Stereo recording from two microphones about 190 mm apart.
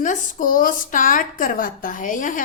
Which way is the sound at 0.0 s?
45° left (ahead or behind).